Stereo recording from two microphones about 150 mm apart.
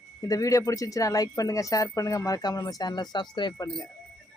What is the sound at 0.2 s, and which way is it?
Speech, 25° left (ahead or behind).